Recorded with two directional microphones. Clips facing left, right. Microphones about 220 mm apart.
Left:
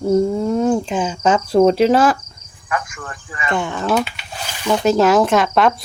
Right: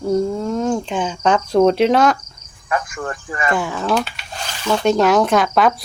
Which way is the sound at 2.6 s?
35° right (ahead or behind).